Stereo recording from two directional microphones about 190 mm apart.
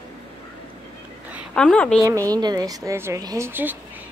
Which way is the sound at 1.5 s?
5° left (ahead or behind).